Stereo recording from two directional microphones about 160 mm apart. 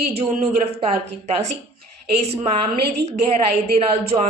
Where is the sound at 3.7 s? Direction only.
40° right (ahead or behind).